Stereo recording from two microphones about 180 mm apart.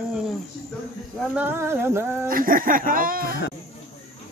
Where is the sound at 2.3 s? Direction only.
50° right (ahead or behind).